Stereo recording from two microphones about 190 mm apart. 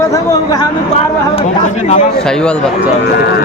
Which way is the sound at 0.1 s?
20° left (ahead or behind).